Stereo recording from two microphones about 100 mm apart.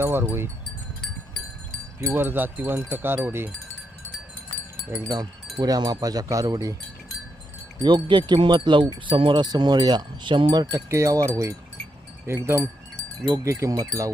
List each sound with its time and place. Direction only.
0.0 s speech: 25° right (ahead or behind)
2.1 s speech: 20° right (ahead or behind)
4.9 s speech: 35° right (ahead or behind)
7.8 s wind chime: 50° right (ahead or behind)
10.8 s speech: 30° right (ahead or behind)